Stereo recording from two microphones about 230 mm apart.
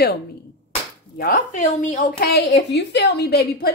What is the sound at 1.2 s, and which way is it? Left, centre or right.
A woman's voice, left.